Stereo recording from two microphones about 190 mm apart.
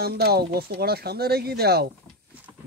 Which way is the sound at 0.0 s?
55° right (ahead or behind).